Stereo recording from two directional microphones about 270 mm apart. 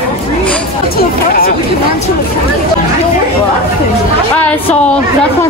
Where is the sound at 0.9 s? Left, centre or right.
Left.